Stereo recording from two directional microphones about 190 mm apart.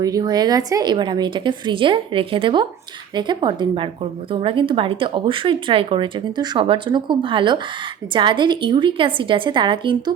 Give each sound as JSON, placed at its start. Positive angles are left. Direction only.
{"t": 0.0, "sound": "speech", "side_deg": -20}